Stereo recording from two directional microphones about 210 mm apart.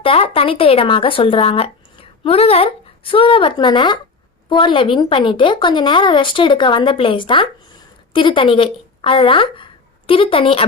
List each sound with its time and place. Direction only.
0.0 s speech: 25° left (ahead or behind)